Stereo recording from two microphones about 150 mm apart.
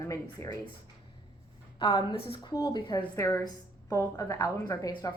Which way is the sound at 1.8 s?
25° left (ahead or behind).